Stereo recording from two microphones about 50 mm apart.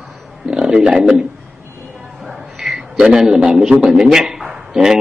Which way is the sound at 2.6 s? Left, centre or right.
Centre.